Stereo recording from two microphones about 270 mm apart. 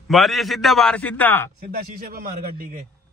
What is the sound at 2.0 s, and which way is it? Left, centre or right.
Speech, right.